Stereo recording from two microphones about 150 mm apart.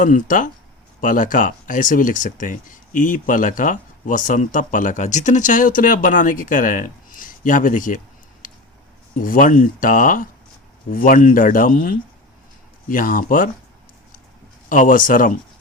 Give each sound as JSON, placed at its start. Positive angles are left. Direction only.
{"t": 0.0, "sound": "speech", "side_deg": 60}
{"t": 14.7, "sound": "speech", "side_deg": 65}